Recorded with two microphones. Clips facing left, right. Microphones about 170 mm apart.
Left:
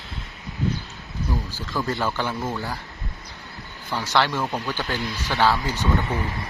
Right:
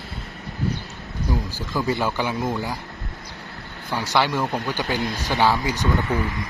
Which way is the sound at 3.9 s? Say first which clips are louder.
Right 1 dB; 10° right (ahead or behind).